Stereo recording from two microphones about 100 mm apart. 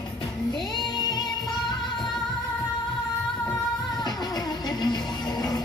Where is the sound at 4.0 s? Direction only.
45° left (ahead or behind).